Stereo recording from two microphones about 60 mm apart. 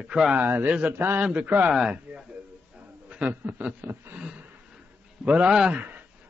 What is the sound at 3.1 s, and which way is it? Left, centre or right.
Speech, right.